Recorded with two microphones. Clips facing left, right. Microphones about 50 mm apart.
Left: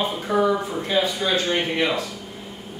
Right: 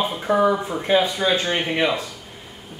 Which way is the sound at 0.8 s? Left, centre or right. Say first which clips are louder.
Right 3 dB; right.